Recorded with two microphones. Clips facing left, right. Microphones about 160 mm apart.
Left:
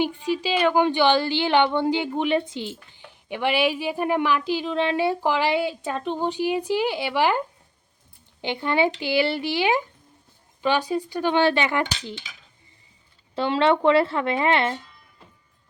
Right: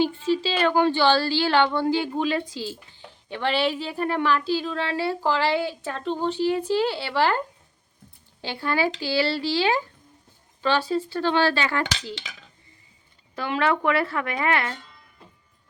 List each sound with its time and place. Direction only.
0.0 s a woman's voice: 15° left (ahead or behind)
12.2 s speech: 75° right (ahead or behind)
13.3 s a woman's voice: 25° left (ahead or behind)